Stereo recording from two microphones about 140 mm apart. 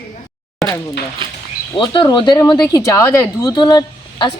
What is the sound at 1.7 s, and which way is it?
Speech, 35° left (ahead or behind).